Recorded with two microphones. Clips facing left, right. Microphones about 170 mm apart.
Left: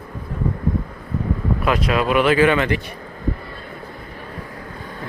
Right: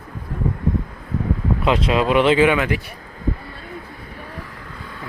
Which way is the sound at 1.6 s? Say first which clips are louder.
Right 1 dB; 25° right (ahead or behind).